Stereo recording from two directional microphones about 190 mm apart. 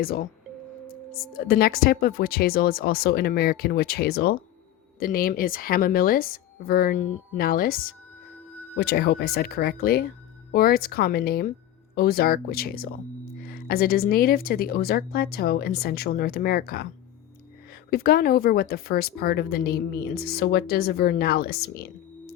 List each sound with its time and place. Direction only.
0.0 s speech: 50° left (ahead or behind)
1.5 s speech: 50° left (ahead or behind)
8.8 s speech: 55° left (ahead or behind)
17.9 s speech: 55° left (ahead or behind)